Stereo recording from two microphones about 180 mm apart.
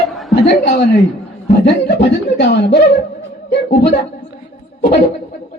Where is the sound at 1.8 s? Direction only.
70° left (ahead or behind).